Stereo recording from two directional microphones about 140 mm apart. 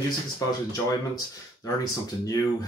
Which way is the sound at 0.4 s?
25° left (ahead or behind).